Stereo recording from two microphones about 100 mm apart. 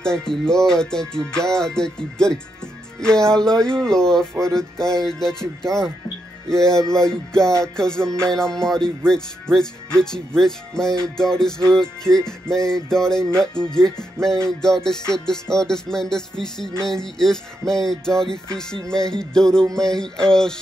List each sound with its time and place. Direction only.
0.0 s speech: 5° left (ahead or behind)
3.0 s music: 5° left (ahead or behind)
9.9 s speech: 5° left (ahead or behind)
14.2 s music: 5° left (ahead or behind)